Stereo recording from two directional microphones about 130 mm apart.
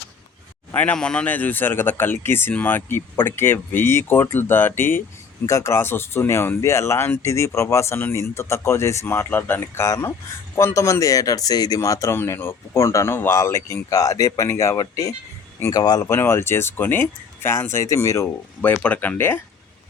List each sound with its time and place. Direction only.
0.7 s speech: 10° left (ahead or behind)